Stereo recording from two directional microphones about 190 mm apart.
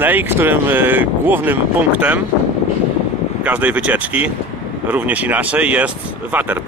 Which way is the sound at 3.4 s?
10° right (ahead or behind).